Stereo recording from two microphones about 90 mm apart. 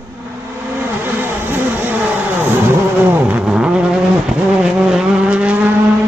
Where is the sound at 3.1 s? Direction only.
20° right (ahead or behind).